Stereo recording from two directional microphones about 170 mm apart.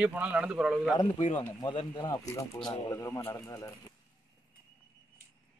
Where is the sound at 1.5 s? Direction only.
25° left (ahead or behind).